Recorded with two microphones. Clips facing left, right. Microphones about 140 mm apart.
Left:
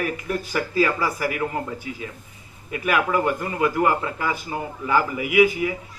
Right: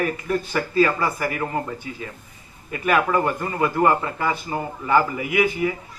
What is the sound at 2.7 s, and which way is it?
A man's voice, 35° right (ahead or behind).